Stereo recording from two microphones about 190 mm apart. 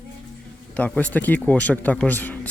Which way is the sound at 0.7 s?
5° left (ahead or behind).